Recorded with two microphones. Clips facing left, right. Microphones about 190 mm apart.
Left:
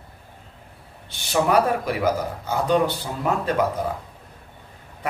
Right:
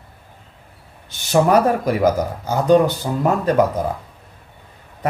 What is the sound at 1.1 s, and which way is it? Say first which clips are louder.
Speech: right 5 dB; 45° right (ahead or behind).